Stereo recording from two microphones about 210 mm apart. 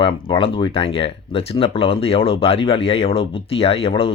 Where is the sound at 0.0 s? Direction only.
25° left (ahead or behind).